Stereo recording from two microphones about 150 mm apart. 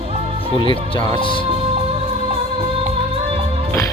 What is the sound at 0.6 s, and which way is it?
Speech, 35° left (ahead or behind).